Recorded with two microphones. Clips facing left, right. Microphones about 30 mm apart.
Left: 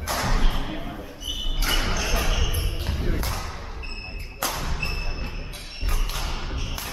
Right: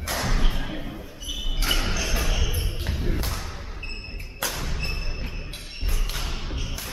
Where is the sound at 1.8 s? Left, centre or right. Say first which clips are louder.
Left 1 dB; centre.